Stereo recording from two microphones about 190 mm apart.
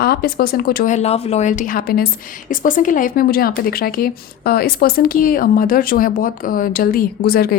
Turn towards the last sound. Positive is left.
turn(degrees=55)  # may be behind; listen again after turning